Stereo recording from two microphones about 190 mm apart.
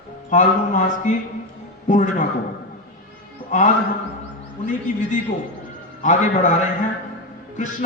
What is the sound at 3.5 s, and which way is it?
Speech, 40° left (ahead or behind).